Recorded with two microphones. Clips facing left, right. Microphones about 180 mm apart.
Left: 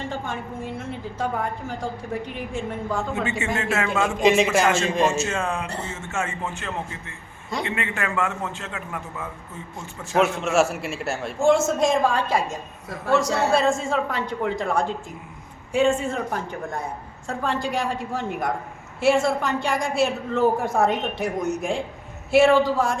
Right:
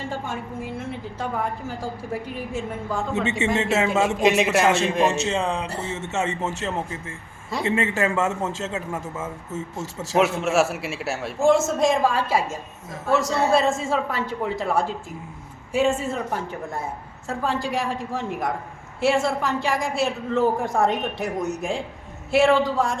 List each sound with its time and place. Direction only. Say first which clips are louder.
0.1 s a woman's voice: even; 5° right (ahead or behind)
3.2 s a man's voice: right 3 dB; 20° right (ahead or behind)
4.2 s a woman's voice: left 2 dB; centre (ahead or behind)
5.3 s a man's voice: right 2 dB; 20° right (ahead or behind)
7.6 s a man's voice: right 6 dB; 25° right (ahead or behind)
10.2 s a woman's voice: even; centre (ahead or behind)